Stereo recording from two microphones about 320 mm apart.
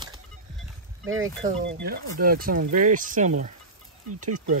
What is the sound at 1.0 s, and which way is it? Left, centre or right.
Speech, right.